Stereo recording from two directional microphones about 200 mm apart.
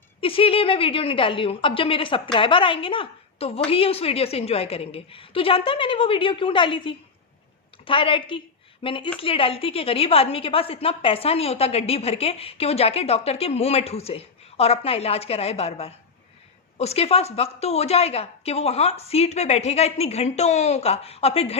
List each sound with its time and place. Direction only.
0.2 s a woman's voice: 25° left (ahead or behind)